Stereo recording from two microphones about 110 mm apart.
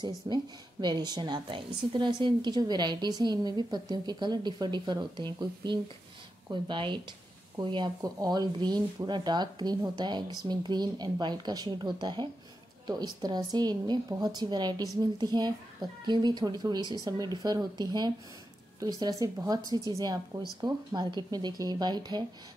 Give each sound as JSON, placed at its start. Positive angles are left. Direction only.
{"t": 0.0, "sound": "a woman's voice", "side_deg": -40}